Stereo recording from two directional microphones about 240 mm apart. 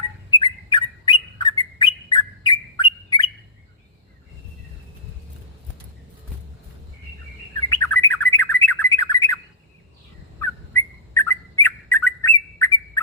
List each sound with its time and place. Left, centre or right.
0.3 s bird: centre
7.8 s bird: centre
10.7 s bird: centre